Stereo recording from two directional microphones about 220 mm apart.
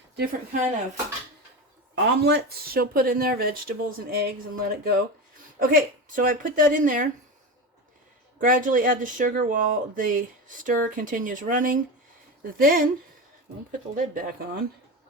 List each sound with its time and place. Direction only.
0.2 s speech: 35° right (ahead or behind)
2.0 s speech: 50° right (ahead or behind)
8.4 s speech: 35° right (ahead or behind)
13.9 s speech: 40° right (ahead or behind)